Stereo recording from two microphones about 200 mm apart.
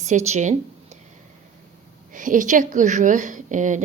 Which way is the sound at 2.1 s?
40° right (ahead or behind).